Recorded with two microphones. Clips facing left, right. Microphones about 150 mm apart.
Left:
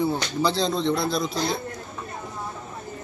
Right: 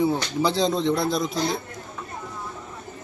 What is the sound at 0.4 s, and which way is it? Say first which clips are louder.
Speech: right 1 dB; 15° right (ahead or behind).